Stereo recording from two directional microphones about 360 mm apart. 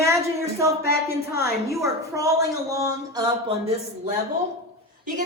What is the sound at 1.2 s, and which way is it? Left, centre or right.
A woman's voice, centre.